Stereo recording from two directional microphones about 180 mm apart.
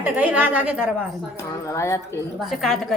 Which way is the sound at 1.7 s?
15° left (ahead or behind).